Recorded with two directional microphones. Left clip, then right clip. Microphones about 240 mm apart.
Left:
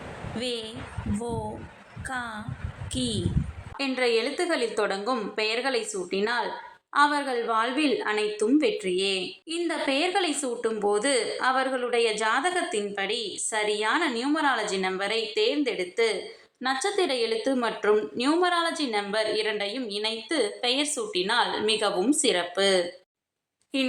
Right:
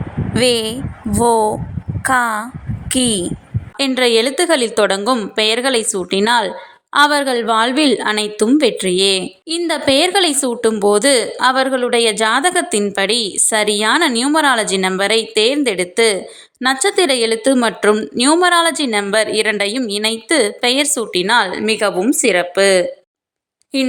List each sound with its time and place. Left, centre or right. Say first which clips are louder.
0.3 s speech: right 17 dB; right
2.0 s a woman's voice: right 18 dB; right